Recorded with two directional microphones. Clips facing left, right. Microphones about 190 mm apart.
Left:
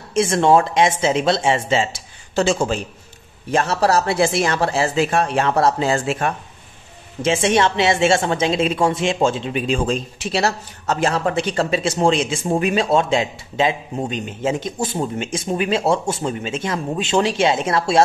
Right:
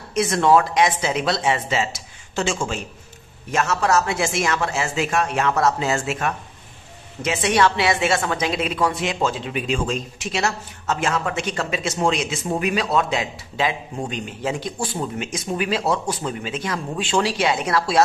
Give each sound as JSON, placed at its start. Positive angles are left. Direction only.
{"t": 0.1, "sound": "a woman's voice", "side_deg": 30}